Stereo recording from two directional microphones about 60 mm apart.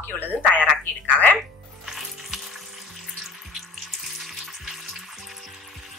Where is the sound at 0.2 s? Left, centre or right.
Right.